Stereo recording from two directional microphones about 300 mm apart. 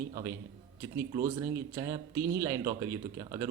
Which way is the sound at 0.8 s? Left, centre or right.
Centre.